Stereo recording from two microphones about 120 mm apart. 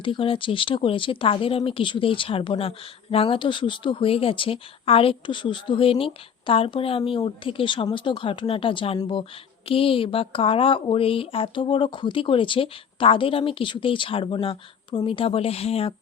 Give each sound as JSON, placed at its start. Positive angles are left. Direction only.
{"t": 0.0, "sound": "speech", "side_deg": 45}